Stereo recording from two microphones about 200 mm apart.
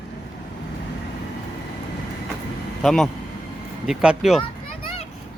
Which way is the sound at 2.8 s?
Centre (ahead or behind).